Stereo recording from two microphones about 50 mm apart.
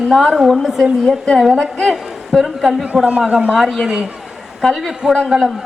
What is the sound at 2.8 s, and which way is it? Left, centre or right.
Speech, right.